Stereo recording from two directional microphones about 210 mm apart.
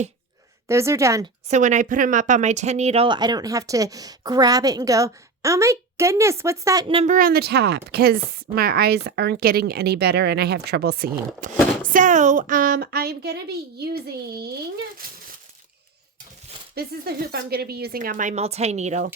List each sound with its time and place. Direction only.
0.7 s speech: 15° right (ahead or behind)
1.5 s speech: 35° right (ahead or behind); by 6.8 s 15° right (ahead or behind)
6.8 s speech: 25° right (ahead or behind)
7.1 s speech: 45° right (ahead or behind)
16.7 s speech: 50° right (ahead or behind)